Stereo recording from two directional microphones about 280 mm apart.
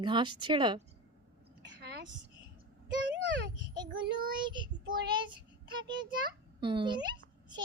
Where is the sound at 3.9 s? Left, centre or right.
Right.